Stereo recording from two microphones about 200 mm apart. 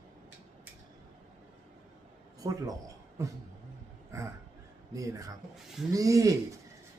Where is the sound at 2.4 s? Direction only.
15° right (ahead or behind).